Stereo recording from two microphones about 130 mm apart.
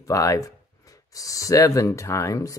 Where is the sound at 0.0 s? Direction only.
25° left (ahead or behind).